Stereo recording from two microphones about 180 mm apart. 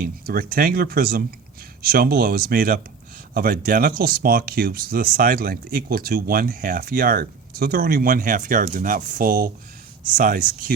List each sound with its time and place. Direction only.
0.0 s speech: 55° right (ahead or behind)